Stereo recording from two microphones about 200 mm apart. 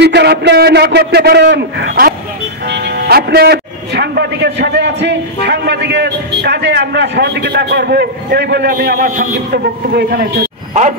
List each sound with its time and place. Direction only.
0.0 s a man's voice: 55° right (ahead or behind)
10.7 s speech: 35° right (ahead or behind)